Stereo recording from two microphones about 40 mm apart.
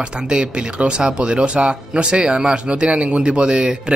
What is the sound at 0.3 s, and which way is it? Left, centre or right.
Speech, right.